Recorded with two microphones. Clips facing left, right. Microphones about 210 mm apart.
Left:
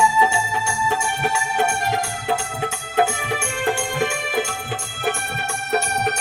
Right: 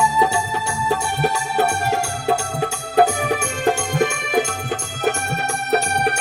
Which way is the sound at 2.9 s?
40° right (ahead or behind).